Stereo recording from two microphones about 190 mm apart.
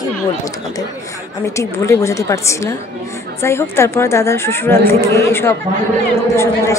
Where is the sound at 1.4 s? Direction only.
15° left (ahead or behind).